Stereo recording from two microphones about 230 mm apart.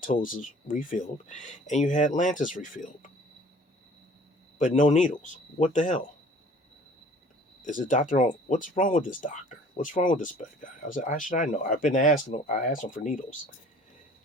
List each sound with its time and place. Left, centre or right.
0.0 s speech: left
4.5 s speech: left
7.6 s speech: left